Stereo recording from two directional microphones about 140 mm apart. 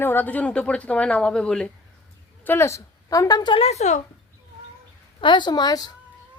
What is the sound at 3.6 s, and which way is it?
Speech, 55° left (ahead or behind).